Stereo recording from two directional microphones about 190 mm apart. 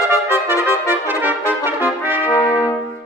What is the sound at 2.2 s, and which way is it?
Brass instrument, 15° left (ahead or behind).